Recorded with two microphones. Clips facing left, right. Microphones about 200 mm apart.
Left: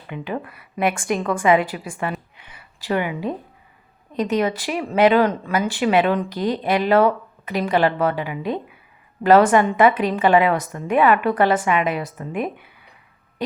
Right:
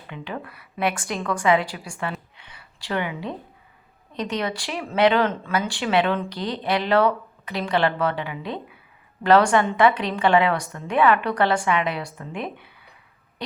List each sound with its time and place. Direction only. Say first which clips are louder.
0.1 s a woman's voice: left 5 dB; 15° left (ahead or behind)